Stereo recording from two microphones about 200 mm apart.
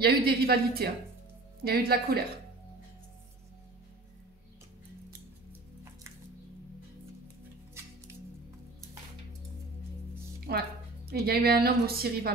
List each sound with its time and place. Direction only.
0.0 s a woman's voice: 50° right (ahead or behind)
7.8 s music: 15° right (ahead or behind)
10.5 s a woman's voice: 50° right (ahead or behind)